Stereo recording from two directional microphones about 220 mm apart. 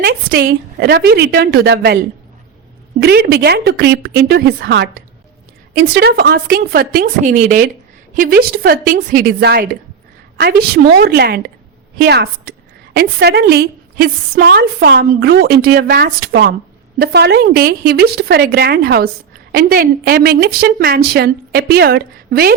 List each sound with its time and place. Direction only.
0.0 s a woman's voice: 45° right (ahead or behind)
3.0 s a woman's voice: 45° right (ahead or behind)
7.2 s a woman's voice: 35° right (ahead or behind)